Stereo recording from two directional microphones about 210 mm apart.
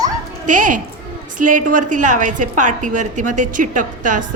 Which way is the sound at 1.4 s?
40° right (ahead or behind).